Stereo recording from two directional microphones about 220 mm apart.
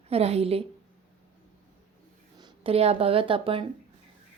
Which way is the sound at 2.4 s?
25° right (ahead or behind).